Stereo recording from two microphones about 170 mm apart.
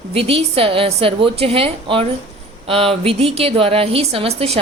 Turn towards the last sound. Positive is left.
turn(degrees=-35)  # may be behind; listen again after turning